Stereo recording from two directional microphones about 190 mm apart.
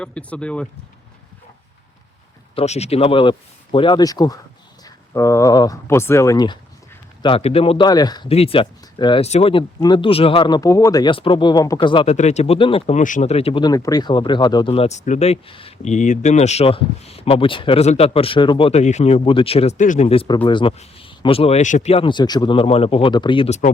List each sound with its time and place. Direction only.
0.0 s speech: 5° left (ahead or behind)
2.6 s speech: 35° left (ahead or behind)
12.1 s speech: 35° left (ahead or behind)
13.0 s speech: 40° left (ahead or behind)